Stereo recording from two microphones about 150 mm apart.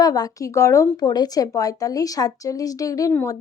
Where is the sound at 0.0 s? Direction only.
25° left (ahead or behind).